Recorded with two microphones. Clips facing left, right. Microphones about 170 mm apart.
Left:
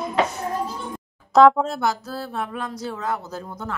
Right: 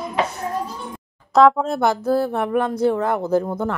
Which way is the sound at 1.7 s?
55° right (ahead or behind).